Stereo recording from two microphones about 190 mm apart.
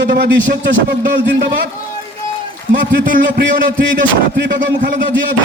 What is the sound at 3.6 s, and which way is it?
Speech, 45° right (ahead or behind).